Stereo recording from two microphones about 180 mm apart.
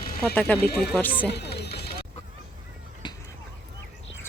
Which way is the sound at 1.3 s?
65° left (ahead or behind).